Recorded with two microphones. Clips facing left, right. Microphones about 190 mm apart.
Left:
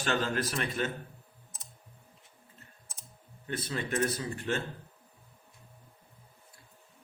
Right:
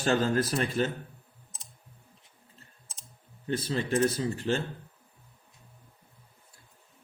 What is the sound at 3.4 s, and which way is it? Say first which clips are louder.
A man's voice: right 5 dB; 30° right (ahead or behind).